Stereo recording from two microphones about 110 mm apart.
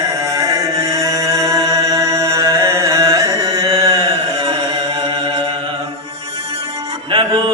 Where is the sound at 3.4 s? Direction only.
30° right (ahead or behind).